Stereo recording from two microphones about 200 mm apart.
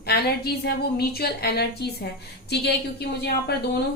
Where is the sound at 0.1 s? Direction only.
50° left (ahead or behind).